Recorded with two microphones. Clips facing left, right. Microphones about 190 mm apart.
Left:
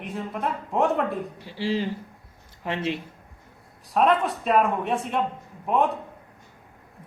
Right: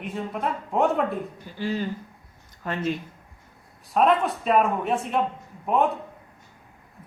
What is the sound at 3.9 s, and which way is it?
Speech, centre (ahead or behind).